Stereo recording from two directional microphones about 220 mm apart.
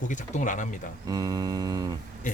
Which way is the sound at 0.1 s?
35° left (ahead or behind).